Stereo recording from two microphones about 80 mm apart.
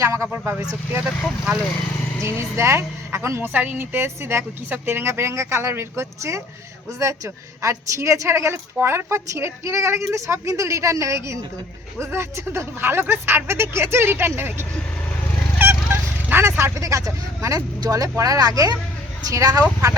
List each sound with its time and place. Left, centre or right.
0.0 s a woman's voice: right
0.3 s a woman's voice: centre
2.2 s a woman's voice: right
3.5 s a woman's voice: right
7.6 s a woman's voice: right
15.5 s fowl: right
16.8 s speech: right